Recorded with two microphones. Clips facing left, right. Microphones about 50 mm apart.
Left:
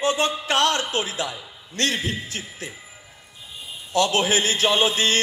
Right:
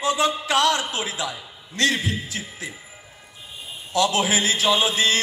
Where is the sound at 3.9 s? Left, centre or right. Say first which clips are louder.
Left 1 dB; left.